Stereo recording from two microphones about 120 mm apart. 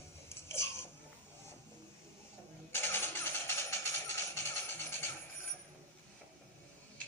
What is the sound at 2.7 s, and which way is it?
Engine starting, 20° left (ahead or behind).